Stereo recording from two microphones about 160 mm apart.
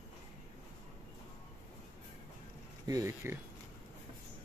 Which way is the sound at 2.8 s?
20° right (ahead or behind).